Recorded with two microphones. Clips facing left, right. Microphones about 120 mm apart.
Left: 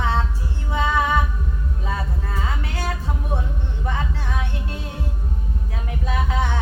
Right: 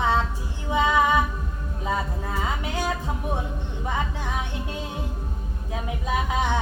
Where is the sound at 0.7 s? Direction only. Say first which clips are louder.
Right 1 dB; 15° right (ahead or behind).